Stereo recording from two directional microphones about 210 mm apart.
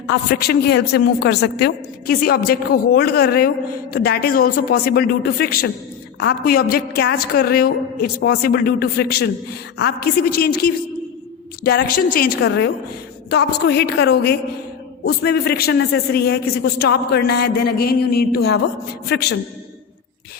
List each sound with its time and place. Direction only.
0.1 s a man's voice: 50° left (ahead or behind)